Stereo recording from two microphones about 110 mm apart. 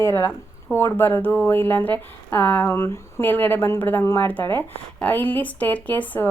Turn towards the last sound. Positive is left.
turn(degrees=15)  # may be behind; listen again after turning